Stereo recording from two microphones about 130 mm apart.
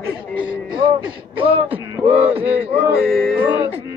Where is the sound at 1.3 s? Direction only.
45° right (ahead or behind).